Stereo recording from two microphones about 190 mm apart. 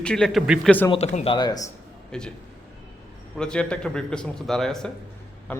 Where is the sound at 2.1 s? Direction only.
5° left (ahead or behind).